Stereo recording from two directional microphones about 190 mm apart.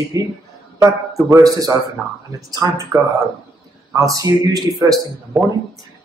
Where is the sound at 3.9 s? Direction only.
15° right (ahead or behind).